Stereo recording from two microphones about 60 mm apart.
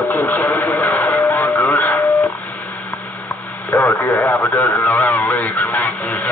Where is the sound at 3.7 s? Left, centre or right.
Left.